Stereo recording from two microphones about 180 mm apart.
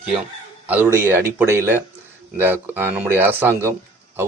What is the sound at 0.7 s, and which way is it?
Speech, 10° right (ahead or behind).